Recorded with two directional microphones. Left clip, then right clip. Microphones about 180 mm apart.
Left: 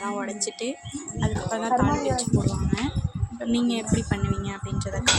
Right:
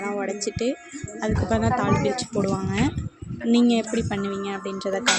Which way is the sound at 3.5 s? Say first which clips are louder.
Right 5 dB; 35° right (ahead or behind).